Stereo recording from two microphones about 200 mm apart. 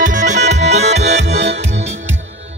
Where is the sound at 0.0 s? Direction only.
40° right (ahead or behind).